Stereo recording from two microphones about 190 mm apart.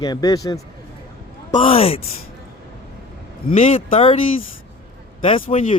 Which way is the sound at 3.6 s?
30° left (ahead or behind).